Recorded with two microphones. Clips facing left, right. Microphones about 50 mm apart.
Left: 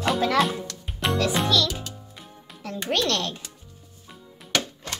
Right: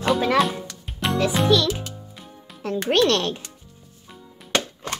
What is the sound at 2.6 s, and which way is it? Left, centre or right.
Music, right.